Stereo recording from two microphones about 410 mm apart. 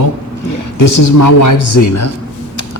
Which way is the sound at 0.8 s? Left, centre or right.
Left.